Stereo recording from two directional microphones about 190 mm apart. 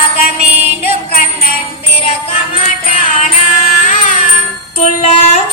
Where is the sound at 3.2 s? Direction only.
40° left (ahead or behind).